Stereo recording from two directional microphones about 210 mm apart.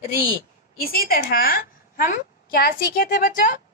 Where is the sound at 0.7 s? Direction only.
45° left (ahead or behind).